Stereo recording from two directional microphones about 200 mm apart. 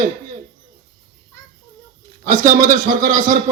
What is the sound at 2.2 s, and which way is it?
A man's voice, 40° right (ahead or behind).